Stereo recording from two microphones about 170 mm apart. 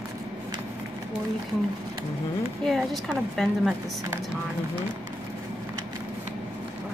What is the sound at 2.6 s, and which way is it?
A woman's voice, centre (ahead or behind).